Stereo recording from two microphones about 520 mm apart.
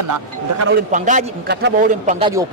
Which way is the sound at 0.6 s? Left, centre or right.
Centre.